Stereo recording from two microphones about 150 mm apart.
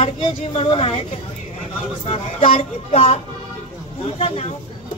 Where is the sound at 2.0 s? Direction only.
40° left (ahead or behind).